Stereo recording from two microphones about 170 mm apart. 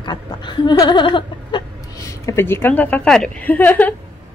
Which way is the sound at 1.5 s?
20° left (ahead or behind).